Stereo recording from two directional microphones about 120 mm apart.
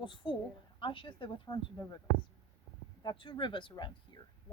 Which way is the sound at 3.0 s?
40° left (ahead or behind).